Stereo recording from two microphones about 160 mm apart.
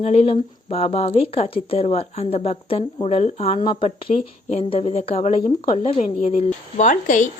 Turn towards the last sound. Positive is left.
turn(degrees=50)  # may be behind; listen again after turning